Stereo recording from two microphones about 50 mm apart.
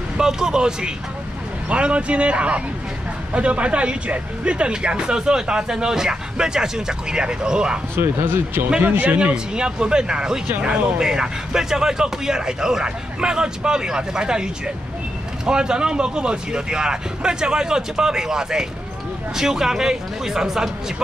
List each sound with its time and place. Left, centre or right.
0.2 s speech: centre
7.9 s a man's voice: right
9.2 s speech: centre